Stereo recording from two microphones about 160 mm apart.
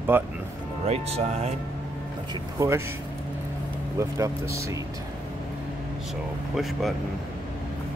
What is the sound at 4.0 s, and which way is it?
Speech, 20° right (ahead or behind).